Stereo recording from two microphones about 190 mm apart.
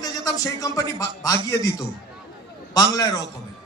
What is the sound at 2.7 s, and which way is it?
Speech, 20° left (ahead or behind).